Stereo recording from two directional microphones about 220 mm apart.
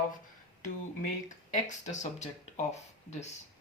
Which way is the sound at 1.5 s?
35° left (ahead or behind).